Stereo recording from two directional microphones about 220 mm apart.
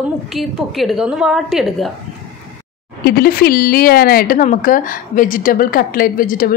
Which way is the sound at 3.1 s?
40° left (ahead or behind).